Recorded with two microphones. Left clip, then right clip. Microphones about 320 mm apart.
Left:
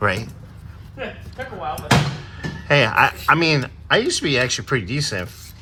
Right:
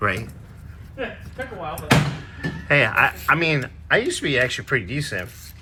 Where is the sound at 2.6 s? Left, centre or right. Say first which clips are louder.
Left 2 dB; centre.